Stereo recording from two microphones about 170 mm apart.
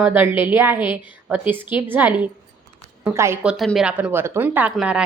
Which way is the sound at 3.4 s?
Centre (ahead or behind).